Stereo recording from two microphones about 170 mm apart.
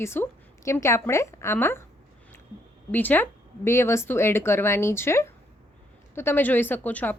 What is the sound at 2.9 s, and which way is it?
Speech, 10° left (ahead or behind).